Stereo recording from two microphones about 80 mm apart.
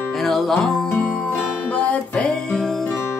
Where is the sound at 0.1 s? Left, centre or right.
Centre.